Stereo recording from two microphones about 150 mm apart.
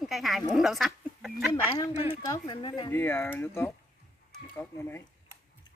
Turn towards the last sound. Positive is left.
turn(degrees=15)  # may be behind; listen again after turning